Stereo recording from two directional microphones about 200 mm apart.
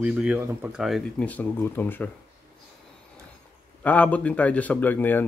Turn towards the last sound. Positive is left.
turn(degrees=10)  # may be behind; listen again after turning